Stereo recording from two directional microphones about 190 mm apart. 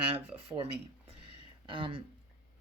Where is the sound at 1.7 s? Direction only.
25° right (ahead or behind).